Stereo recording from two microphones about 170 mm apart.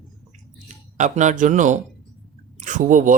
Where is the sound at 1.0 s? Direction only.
45° right (ahead or behind).